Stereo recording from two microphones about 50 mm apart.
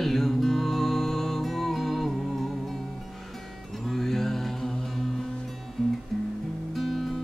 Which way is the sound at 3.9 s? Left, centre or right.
Centre.